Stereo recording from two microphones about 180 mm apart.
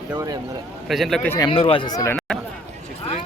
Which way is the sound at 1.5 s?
30° left (ahead or behind).